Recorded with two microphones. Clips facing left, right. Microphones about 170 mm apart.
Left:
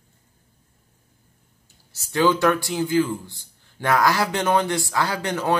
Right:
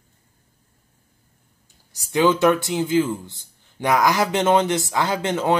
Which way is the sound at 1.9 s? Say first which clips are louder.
Right 2 dB; 20° right (ahead or behind).